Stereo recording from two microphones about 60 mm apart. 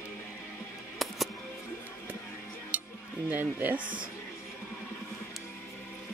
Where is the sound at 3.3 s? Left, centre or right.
Right.